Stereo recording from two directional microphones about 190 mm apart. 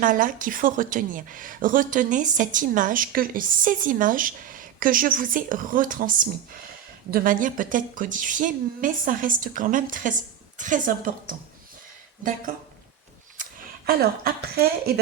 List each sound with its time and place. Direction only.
0.0 s speech: 45° right (ahead or behind)
13.3 s speech: 45° right (ahead or behind)